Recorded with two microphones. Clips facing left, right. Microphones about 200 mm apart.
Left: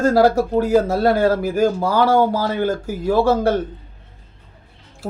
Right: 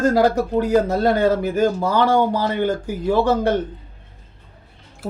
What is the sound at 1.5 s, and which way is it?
Speech, 5° left (ahead or behind).